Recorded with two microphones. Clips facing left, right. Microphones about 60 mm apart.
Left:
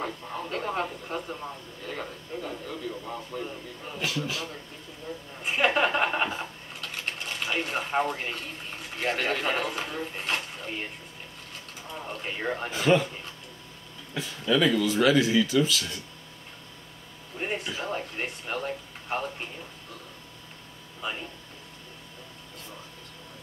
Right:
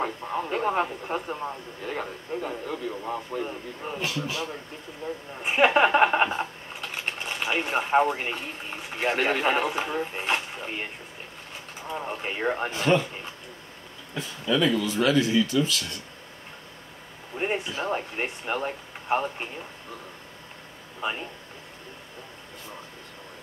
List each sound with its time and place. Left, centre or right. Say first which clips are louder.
0.0 s a man's voice: right 5 dB; right
11.9 s a man's voice: right 4 dB; right
12.7 s speech: left 1 dB; centre
14.4 s speech: even; centre
17.3 s a sound: right 5 dB; right
17.7 s a man's voice: right 4 dB; right